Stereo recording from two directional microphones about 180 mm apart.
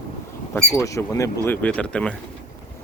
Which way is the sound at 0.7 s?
15° left (ahead or behind).